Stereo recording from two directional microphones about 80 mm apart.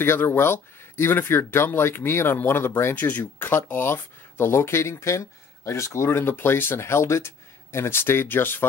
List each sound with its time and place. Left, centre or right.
0.0 s speech: left